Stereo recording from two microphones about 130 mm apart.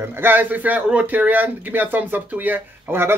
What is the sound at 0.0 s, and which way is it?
A man's voice, 15° right (ahead or behind).